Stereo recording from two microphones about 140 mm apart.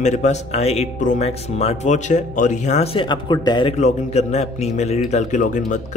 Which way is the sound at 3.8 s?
55° left (ahead or behind).